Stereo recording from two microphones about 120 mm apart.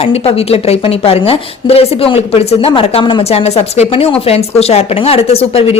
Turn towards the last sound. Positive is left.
turn(degrees=55)  # may be behind; listen again after turning